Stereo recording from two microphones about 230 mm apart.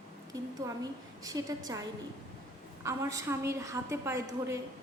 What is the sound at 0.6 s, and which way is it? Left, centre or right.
Speech, centre.